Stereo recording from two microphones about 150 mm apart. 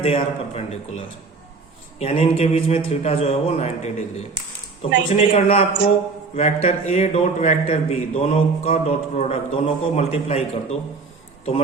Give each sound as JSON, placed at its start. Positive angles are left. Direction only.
{"t": 0.0, "sound": "a man's voice", "side_deg": 40}